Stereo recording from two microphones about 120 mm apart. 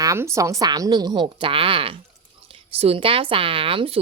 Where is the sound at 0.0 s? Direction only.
25° right (ahead or behind).